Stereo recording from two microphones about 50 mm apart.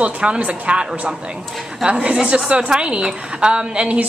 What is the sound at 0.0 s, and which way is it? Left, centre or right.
A woman's voice, right.